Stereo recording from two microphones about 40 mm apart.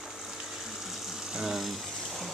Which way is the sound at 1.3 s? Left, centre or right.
Centre.